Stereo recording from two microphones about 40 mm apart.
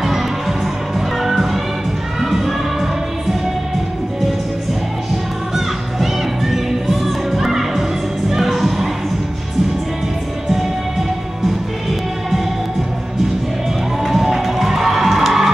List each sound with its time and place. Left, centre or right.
0.0 s music: centre
5.9 s music: centre
14.0 s music: centre